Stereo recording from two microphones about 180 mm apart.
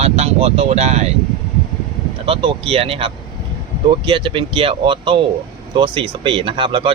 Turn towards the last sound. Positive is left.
turn(degrees=-30)  # may be behind; listen again after turning